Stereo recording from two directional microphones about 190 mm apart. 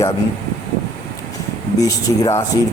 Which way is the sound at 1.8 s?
20° left (ahead or behind).